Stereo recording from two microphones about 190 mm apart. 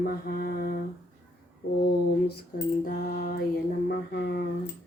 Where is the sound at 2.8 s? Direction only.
50° left (ahead or behind).